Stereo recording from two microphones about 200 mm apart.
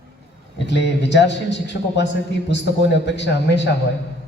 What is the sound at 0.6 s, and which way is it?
A man's voice, 60° left (ahead or behind).